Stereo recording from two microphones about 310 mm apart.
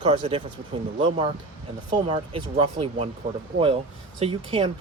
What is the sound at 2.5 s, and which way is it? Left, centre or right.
Speech, centre.